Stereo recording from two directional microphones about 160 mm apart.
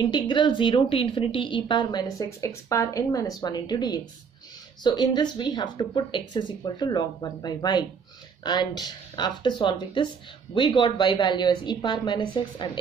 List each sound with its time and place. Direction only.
0.0 s speech: 30° left (ahead or behind)